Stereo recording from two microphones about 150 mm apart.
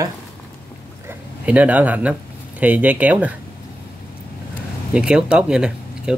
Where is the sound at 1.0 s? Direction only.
10° right (ahead or behind).